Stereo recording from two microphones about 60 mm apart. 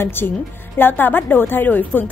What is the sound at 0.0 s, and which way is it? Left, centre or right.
A woman's voice, left.